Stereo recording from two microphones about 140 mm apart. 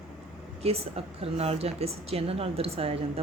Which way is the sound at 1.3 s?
45° right (ahead or behind).